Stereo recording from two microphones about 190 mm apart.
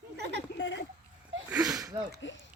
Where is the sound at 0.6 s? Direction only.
70° left (ahead or behind).